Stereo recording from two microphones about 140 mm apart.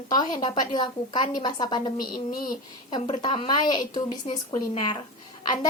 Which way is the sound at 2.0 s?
90° left.